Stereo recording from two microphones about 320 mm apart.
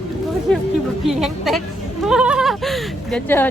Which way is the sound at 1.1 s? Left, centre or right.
Centre.